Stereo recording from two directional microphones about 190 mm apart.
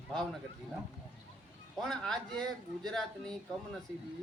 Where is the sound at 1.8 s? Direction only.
Centre (ahead or behind).